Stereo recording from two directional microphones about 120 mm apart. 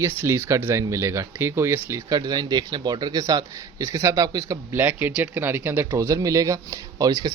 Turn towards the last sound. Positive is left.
turn(degrees=-30)  # may be behind; listen again after turning